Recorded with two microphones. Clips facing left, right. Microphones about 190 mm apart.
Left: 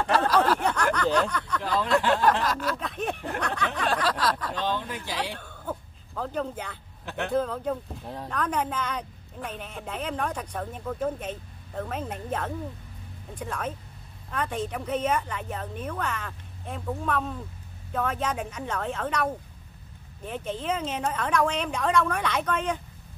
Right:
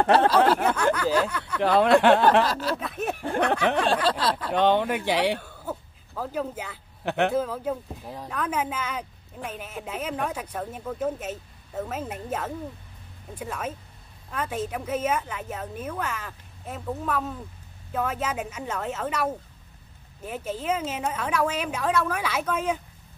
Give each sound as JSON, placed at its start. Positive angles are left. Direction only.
{"t": 0.0, "sound": "a sound", "side_deg": -65}
{"t": 0.6, "sound": "a woman's voice", "side_deg": -5}
{"t": 1.6, "sound": "speech", "side_deg": -70}
{"t": 2.4, "sound": "a sound", "side_deg": -30}
{"t": 2.8, "sound": "a woman's voice", "side_deg": -5}
{"t": 3.8, "sound": "a sound", "side_deg": -30}
{"t": 4.5, "sound": "speech", "side_deg": -65}
{"t": 5.4, "sound": "speech", "side_deg": -5}
{"t": 7.1, "sound": "speech", "side_deg": -70}
{"t": 7.3, "sound": "a woman's voice", "side_deg": -5}